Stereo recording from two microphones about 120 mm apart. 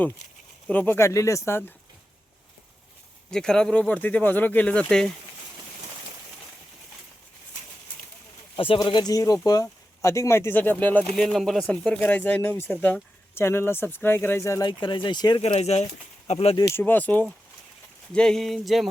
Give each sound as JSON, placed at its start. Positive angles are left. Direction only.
{"t": 0.7, "sound": "speech", "side_deg": 15}
{"t": 3.2, "sound": "speech", "side_deg": 5}
{"t": 8.5, "sound": "speech", "side_deg": 50}
{"t": 8.8, "sound": "speech", "side_deg": 35}
{"t": 11.1, "sound": "speech", "side_deg": 5}
{"t": 14.6, "sound": "speech", "side_deg": 40}
{"t": 15.4, "sound": "speech", "side_deg": 55}
{"t": 16.6, "sound": "speech", "side_deg": 20}